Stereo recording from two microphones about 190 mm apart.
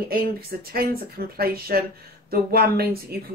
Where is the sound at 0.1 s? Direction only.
50° right (ahead or behind).